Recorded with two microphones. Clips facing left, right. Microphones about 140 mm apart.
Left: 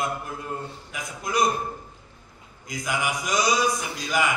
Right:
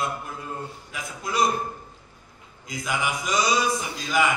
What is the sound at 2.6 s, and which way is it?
A man's voice, 20° left (ahead or behind).